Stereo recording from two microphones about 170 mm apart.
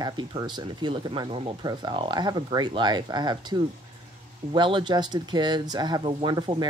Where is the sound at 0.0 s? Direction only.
25° right (ahead or behind).